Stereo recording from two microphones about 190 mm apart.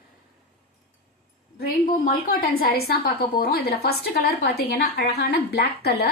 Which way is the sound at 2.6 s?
55° left (ahead or behind).